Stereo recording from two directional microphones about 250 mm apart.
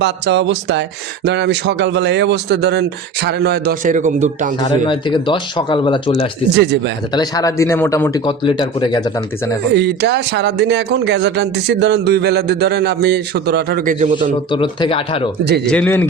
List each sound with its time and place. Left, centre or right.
0.0 s speech: right
4.9 s speech: centre
6.6 s speech: right
7.1 s speech: centre
9.7 s speech: right
14.5 s speech: centre
15.6 s a man's voice: centre